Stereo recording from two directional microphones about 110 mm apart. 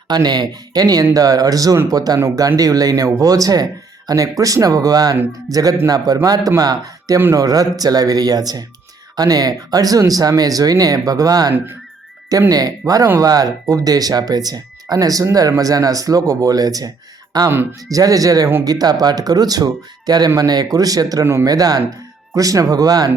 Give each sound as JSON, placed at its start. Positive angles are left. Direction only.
{"t": 0.1, "sound": "speech", "side_deg": -40}
{"t": 17.5, "sound": "speech", "side_deg": -20}
{"t": 17.9, "sound": "speech", "side_deg": -30}